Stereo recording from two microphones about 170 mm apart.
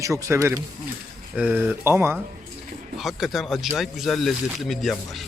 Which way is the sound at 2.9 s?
Centre (ahead or behind).